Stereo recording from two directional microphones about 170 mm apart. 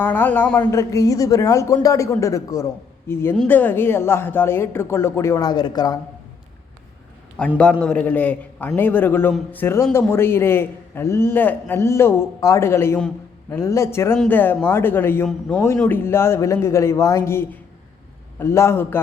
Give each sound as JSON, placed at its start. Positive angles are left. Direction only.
{"t": 0.0, "sound": "a man's voice", "side_deg": 10}
{"t": 7.3, "sound": "a man's voice", "side_deg": 5}
{"t": 15.3, "sound": "a man's voice", "side_deg": 0}